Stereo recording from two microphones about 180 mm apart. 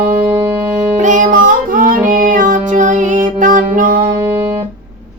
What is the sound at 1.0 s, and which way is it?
Music, 45° right (ahead or behind).